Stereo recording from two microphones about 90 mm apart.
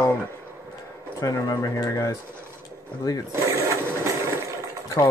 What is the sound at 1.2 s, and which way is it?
Speech, 40° left (ahead or behind).